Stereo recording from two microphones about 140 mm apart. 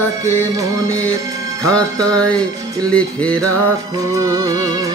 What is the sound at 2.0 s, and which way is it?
Music, 5° left (ahead or behind).